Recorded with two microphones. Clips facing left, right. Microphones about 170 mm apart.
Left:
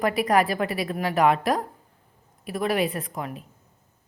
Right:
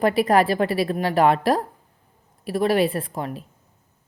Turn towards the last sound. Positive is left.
turn(degrees=-30)  # may be behind; listen again after turning